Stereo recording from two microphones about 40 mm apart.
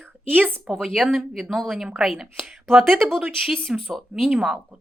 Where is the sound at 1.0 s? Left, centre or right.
Centre.